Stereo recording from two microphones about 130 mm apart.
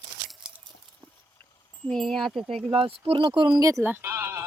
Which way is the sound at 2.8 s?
45° right (ahead or behind).